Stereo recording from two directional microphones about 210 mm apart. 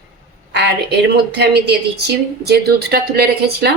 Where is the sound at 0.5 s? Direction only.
55° right (ahead or behind).